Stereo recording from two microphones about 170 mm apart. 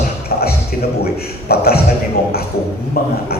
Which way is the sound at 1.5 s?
65° left (ahead or behind).